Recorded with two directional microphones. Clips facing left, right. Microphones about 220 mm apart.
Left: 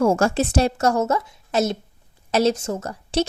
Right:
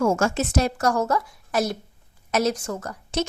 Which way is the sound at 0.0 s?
35° left (ahead or behind).